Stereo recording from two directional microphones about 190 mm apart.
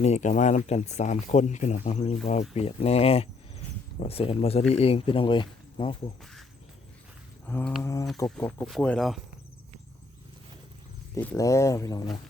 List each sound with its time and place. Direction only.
0.0 s speech: 40° left (ahead or behind)
7.4 s a sound: 10° left (ahead or behind)
7.8 s speech: 15° left (ahead or behind); by 9.2 s centre (ahead or behind)
11.1 s speech: 10° left (ahead or behind)